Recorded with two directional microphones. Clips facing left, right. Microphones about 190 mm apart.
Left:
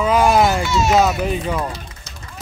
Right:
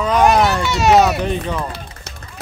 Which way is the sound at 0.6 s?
65° right (ahead or behind).